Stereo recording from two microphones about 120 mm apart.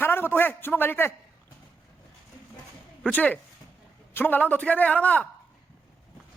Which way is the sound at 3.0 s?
10° left (ahead or behind).